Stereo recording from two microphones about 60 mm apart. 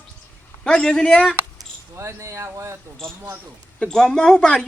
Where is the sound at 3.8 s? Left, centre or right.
Centre.